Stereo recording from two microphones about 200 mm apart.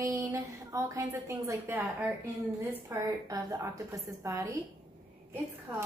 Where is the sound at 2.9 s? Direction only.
15° right (ahead or behind).